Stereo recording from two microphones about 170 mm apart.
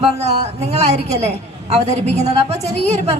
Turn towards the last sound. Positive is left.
turn(degrees=-40)  # may be behind; listen again after turning